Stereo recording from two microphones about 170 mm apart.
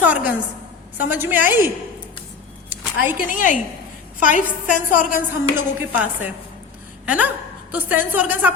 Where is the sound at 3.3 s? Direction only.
50° left (ahead or behind).